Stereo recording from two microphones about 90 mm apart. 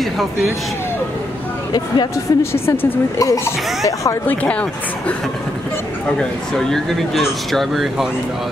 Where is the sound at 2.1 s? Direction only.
30° left (ahead or behind).